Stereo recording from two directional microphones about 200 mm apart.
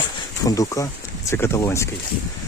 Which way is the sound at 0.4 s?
15° left (ahead or behind).